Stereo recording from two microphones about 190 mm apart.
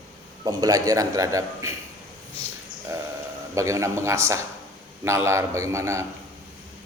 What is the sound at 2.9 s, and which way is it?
A man's voice, 15° right (ahead or behind).